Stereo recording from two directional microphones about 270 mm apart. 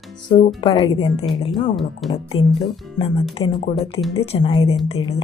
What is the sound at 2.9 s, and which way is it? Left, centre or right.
Speech, centre.